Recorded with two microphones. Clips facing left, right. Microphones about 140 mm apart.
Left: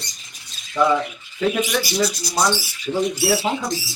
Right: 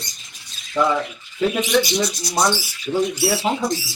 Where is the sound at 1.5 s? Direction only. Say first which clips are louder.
Right 3 dB; centre (ahead or behind).